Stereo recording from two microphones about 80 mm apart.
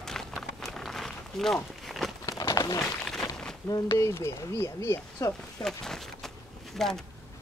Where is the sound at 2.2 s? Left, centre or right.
Left.